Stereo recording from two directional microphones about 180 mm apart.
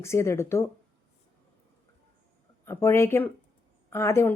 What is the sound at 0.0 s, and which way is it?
Speech, 15° left (ahead or behind).